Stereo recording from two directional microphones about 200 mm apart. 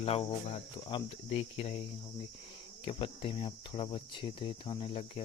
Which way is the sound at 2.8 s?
25° left (ahead or behind).